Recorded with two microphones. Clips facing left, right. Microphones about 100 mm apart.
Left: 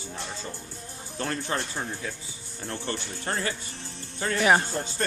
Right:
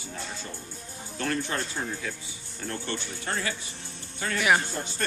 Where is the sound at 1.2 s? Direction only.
30° left (ahead or behind).